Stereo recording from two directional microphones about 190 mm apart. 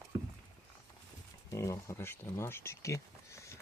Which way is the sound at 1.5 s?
15° left (ahead or behind).